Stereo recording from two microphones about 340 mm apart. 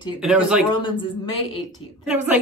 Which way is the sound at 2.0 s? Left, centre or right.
Centre.